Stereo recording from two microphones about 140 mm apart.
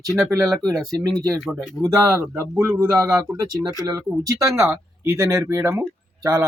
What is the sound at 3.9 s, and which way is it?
Speech, 25° right (ahead or behind).